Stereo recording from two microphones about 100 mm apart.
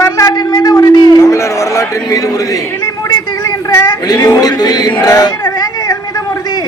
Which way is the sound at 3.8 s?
40° left (ahead or behind).